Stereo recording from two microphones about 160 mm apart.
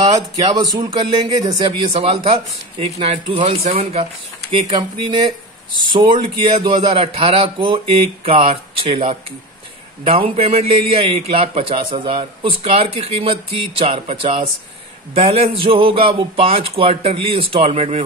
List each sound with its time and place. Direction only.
0.4 s speech: 25° right (ahead or behind)
1.7 s a man's voice: 35° right (ahead or behind)
15.1 s a man's voice: 40° right (ahead or behind)